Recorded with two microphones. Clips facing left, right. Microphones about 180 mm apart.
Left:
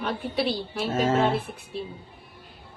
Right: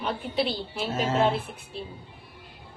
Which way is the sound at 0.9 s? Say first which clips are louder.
Left 2 dB; 45° left (ahead or behind).